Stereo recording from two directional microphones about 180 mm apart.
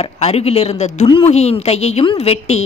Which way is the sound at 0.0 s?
35° left (ahead or behind).